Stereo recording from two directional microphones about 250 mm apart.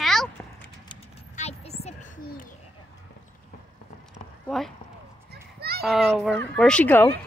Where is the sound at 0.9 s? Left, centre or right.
Left.